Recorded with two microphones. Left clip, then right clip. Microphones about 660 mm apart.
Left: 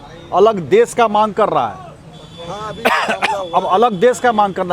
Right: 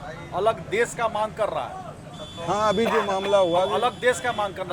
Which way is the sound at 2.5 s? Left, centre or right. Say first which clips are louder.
Right 5 dB; right.